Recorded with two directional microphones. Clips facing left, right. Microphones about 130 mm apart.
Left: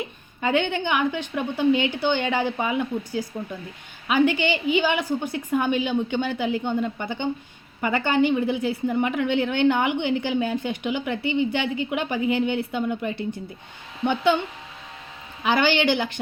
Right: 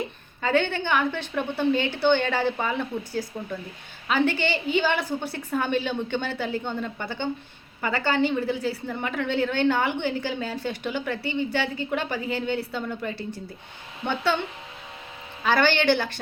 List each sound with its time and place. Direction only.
0.4 s a woman's voice: 15° left (ahead or behind)
15.4 s a woman's voice: 15° left (ahead or behind)